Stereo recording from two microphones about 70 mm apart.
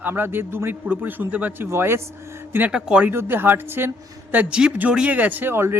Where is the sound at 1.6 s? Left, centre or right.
Right.